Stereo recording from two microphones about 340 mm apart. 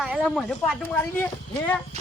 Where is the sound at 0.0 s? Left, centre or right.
Centre.